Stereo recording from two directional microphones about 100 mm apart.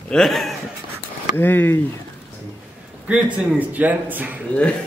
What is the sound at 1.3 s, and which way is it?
Speech, 20° left (ahead or behind).